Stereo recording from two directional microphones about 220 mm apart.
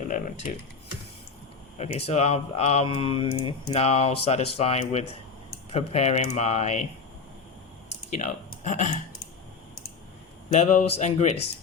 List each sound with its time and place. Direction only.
1.8 s speech: 30° left (ahead or behind)
3.7 s speech: 30° left (ahead or behind)
8.1 s speech: 35° left (ahead or behind)
10.5 s speech: 30° left (ahead or behind)